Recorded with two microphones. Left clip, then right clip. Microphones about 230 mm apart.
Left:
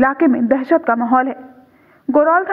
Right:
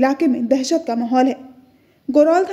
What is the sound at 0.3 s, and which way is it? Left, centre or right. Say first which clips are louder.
Speech: left 2 dB; left.